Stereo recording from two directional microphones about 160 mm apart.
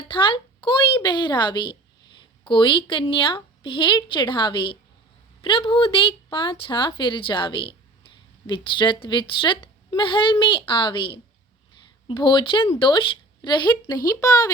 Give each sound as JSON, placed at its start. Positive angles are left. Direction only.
{"t": 0.1, "sound": "a woman's voice", "side_deg": 30}